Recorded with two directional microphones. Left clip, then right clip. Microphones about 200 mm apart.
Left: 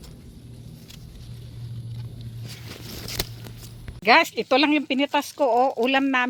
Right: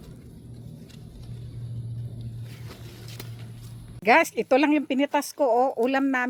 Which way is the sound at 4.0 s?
Centre (ahead or behind).